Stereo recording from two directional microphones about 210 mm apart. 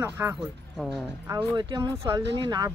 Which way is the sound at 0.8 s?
Centre (ahead or behind).